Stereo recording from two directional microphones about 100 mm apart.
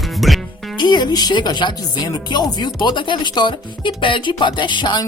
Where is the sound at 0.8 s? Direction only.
45° left (ahead or behind).